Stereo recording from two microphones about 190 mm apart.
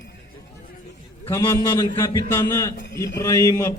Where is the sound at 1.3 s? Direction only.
15° left (ahead or behind).